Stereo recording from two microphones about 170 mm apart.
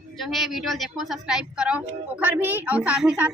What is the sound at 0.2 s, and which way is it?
A woman's voice, centre (ahead or behind).